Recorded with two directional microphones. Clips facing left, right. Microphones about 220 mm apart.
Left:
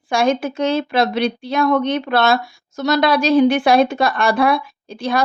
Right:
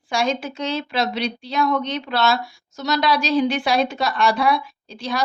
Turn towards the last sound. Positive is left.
turn(degrees=55)  # may be behind; listen again after turning